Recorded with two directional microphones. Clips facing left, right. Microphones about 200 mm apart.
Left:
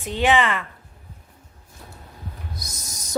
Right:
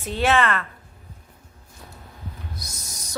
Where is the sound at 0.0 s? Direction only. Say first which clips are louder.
Left 1 dB; 15° left (ahead or behind).